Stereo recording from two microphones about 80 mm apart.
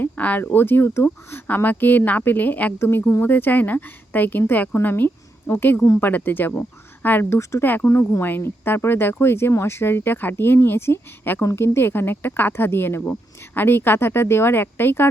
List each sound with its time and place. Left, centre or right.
0.0 s a woman's voice: centre